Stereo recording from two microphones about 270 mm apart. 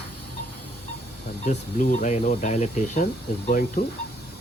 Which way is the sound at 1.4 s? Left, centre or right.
Left.